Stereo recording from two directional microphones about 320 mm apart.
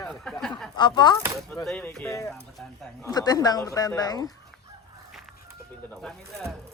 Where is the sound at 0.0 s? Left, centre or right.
Centre.